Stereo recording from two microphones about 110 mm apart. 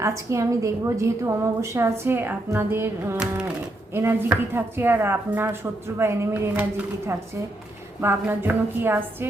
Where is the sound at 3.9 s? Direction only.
20° right (ahead or behind).